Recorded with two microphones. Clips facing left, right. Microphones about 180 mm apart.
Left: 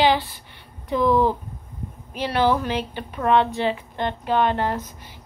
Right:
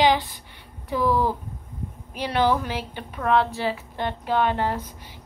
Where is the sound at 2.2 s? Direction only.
15° right (ahead or behind).